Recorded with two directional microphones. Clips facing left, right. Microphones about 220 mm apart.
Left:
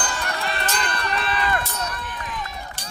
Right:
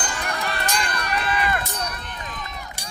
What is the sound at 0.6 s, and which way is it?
Run, 15° right (ahead or behind).